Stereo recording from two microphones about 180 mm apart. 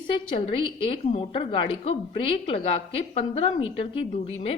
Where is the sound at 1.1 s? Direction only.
30° left (ahead or behind).